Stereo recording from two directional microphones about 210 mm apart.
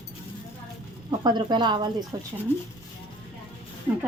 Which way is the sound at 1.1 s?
20° right (ahead or behind).